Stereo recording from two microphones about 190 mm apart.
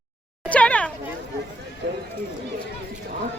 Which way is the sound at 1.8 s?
65° right (ahead or behind).